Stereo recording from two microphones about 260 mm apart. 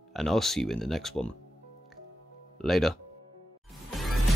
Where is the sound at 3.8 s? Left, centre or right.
Centre.